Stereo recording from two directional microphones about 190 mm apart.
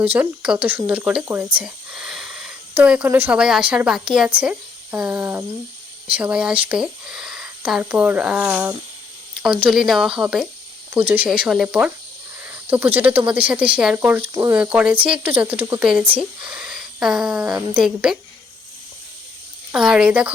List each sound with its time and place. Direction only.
0.0 s speech: 5° right (ahead or behind)
14.2 s speech: 20° right (ahead or behind)
14.5 s speech: 5° right (ahead or behind)
19.7 s speech: 5° right (ahead or behind)